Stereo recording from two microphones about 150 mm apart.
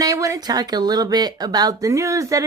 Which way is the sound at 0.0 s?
20° right (ahead or behind).